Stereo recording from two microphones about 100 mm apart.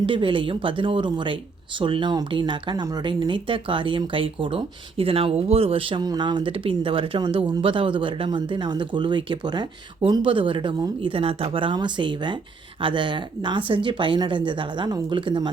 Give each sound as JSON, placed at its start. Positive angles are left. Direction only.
{"t": 0.0, "sound": "speech", "side_deg": -60}
{"t": 6.0, "sound": "speech", "side_deg": -45}
{"t": 10.1, "sound": "speech", "side_deg": -60}
{"t": 11.0, "sound": "speech", "side_deg": -65}